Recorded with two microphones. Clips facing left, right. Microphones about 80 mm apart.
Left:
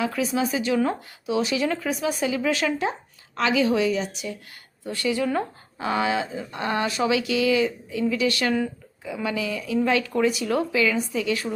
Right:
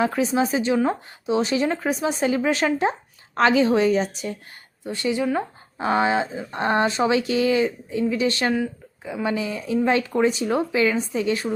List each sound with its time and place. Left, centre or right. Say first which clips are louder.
0.0 s speech: right 3 dB; right
4.8 s speech: right 1 dB; right